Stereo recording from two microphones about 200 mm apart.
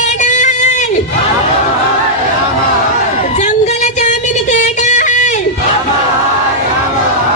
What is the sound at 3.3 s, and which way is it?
Music, 35° left (ahead or behind).